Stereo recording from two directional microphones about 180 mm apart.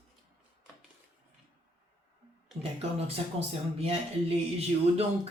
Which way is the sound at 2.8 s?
35° right (ahead or behind).